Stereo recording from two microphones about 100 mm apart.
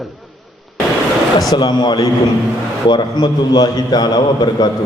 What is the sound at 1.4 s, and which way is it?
A man's voice, 40° left (ahead or behind).